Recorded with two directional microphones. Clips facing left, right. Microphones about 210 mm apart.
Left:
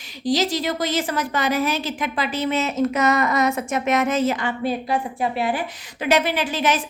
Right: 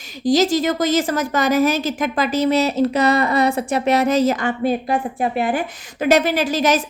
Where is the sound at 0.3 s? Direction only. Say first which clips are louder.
Right 5 dB; 45° right (ahead or behind).